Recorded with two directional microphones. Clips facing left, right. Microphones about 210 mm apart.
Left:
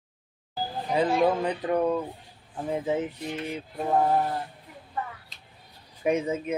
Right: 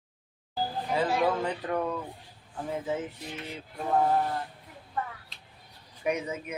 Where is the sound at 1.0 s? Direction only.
15° left (ahead or behind).